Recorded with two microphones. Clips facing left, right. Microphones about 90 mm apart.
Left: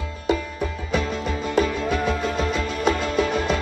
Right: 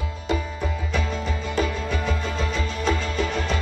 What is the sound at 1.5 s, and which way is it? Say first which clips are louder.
Music: left 5 dB; 55° left (ahead or behind).